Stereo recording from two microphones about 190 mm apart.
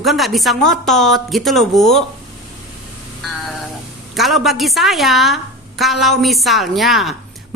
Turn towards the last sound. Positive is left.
turn(degrees=0)  # may be behind; listen again after turning